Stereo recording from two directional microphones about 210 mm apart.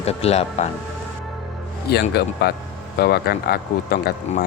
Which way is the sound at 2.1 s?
50° left (ahead or behind).